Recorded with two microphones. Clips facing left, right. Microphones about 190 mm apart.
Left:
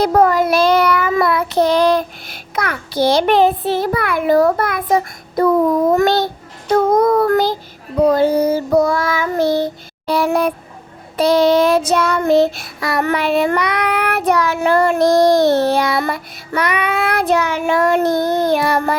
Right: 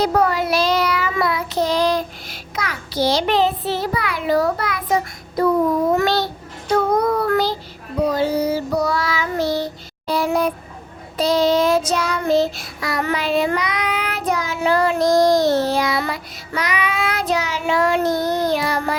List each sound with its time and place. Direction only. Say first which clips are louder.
0.0 s child singing: left 5 dB; 50° left (ahead or behind)
5.4 s a child's voice: left 3 dB; 55° left (ahead or behind)
6.0 s child singing: left 4 dB; 50° left (ahead or behind)